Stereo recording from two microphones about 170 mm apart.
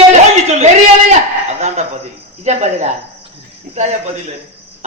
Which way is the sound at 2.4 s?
40° right (ahead or behind).